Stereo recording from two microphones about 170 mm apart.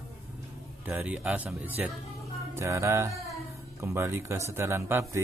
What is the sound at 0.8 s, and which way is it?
A man's voice, 10° right (ahead or behind).